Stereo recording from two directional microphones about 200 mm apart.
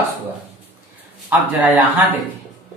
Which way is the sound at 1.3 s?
10° right (ahead or behind).